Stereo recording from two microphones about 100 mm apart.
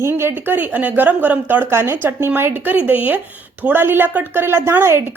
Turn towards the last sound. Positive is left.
turn(degrees=-25)  # may be behind; listen again after turning